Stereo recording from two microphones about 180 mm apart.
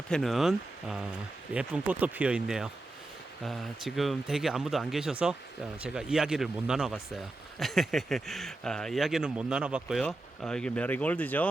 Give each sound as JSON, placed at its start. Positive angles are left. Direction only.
{"t": 0.1, "sound": "speech", "side_deg": 0}